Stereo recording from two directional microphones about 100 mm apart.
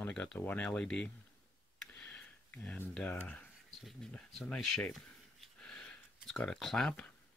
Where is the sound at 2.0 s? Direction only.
15° left (ahead or behind).